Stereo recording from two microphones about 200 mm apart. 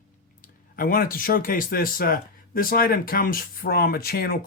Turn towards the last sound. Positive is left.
turn(degrees=50)  # may be behind; listen again after turning